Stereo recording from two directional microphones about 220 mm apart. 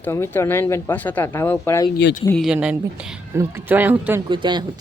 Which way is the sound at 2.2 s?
Centre (ahead or behind).